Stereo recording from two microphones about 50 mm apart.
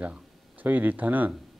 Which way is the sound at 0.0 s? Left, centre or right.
Right.